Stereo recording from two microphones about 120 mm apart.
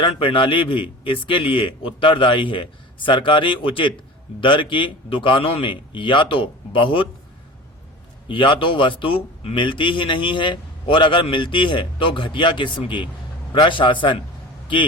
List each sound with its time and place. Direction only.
0.0 s a man's voice: 45° left (ahead or behind)
8.3 s a man's voice: 45° left (ahead or behind)